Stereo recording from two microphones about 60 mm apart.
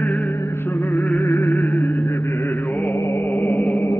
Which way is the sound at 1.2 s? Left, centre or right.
Left.